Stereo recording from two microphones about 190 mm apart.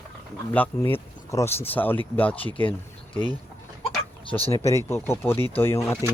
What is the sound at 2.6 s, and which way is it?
Speech, 25° left (ahead or behind).